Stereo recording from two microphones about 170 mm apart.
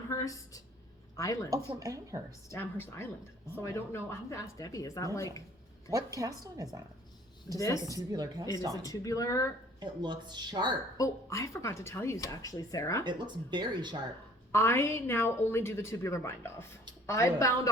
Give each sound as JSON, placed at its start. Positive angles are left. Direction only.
{"t": 0.1, "sound": "speech", "side_deg": 20}
{"t": 1.5, "sound": "speech", "side_deg": -20}
{"t": 2.5, "sound": "a woman's voice", "side_deg": 15}
{"t": 5.9, "sound": "speech", "side_deg": -20}
{"t": 7.6, "sound": "speech", "side_deg": 20}
{"t": 7.9, "sound": "speech", "side_deg": -20}
{"t": 8.8, "sound": "speech", "side_deg": 20}
{"t": 9.8, "sound": "speech", "side_deg": -25}
{"t": 10.9, "sound": "a woman's voice", "side_deg": 20}
{"t": 13.1, "sound": "speech", "side_deg": -25}
{"t": 14.5, "sound": "a woman's voice", "side_deg": 15}